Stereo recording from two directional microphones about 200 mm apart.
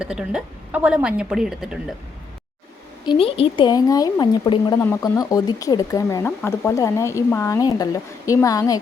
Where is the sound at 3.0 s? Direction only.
25° left (ahead or behind).